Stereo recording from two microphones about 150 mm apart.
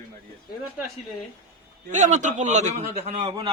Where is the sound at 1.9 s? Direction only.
55° right (ahead or behind).